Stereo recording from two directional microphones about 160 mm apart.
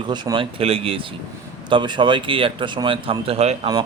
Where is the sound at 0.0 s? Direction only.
30° right (ahead or behind).